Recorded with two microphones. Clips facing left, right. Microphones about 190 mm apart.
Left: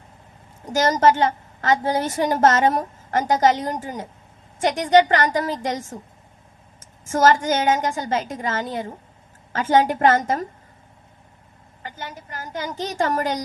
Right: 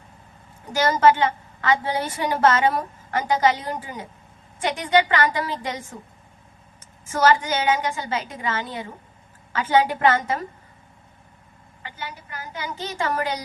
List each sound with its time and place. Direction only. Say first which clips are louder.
0.6 s a woman's voice: left 1 dB; 45° left (ahead or behind)
7.0 s a woman's voice: left 2 dB; 45° left (ahead or behind)
11.8 s a woman's voice: left 1 dB; 45° left (ahead or behind)